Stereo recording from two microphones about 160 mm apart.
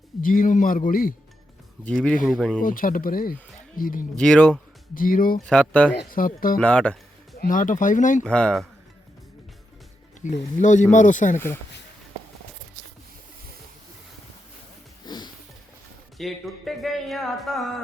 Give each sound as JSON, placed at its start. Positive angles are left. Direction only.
{"t": 0.2, "sound": "a man's voice", "side_deg": 60}
{"t": 1.8, "sound": "speech", "side_deg": 5}
{"t": 2.6, "sound": "a man's voice", "side_deg": 60}
{"t": 4.2, "sound": "speech", "side_deg": 5}
{"t": 4.9, "sound": "a man's voice", "side_deg": 60}
{"t": 5.5, "sound": "speech", "side_deg": 5}
{"t": 6.0, "sound": "a man's voice", "side_deg": 60}
{"t": 6.6, "sound": "speech", "side_deg": 5}
{"t": 7.3, "sound": "a man's voice", "side_deg": 60}
{"t": 8.2, "sound": "speech", "side_deg": 5}
{"t": 10.2, "sound": "speech", "side_deg": 50}
{"t": 15.0, "sound": "sniff", "side_deg": 25}
{"t": 16.1, "sound": "speech", "side_deg": 0}